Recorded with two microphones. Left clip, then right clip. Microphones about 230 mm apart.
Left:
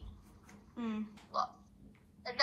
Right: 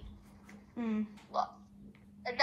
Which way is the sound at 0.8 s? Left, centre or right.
Right.